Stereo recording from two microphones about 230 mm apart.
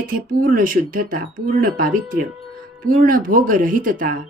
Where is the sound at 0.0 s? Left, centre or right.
Right.